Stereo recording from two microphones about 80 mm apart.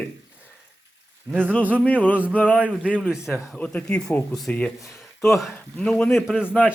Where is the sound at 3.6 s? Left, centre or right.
Centre.